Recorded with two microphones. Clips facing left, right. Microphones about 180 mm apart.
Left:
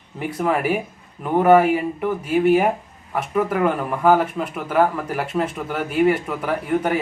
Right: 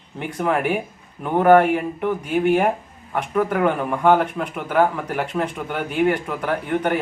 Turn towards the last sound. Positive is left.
turn(degrees=5)  # may be behind; listen again after turning